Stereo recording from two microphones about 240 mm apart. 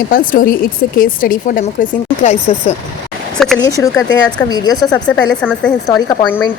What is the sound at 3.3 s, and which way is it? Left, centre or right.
Speech, centre.